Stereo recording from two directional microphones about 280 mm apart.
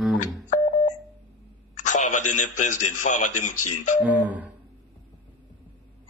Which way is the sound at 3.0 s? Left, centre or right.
Left.